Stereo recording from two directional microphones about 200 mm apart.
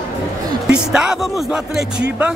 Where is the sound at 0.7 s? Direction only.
5° right (ahead or behind).